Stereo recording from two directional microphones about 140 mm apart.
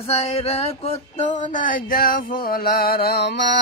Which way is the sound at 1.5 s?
80° left.